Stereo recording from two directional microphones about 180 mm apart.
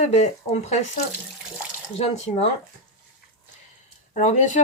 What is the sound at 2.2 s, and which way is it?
Speech, 35° left (ahead or behind).